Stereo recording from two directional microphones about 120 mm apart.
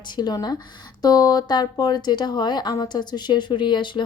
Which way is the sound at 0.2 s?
35° left (ahead or behind).